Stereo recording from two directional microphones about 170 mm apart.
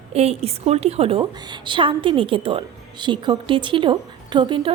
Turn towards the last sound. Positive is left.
turn(degrees=-25)  # may be behind; listen again after turning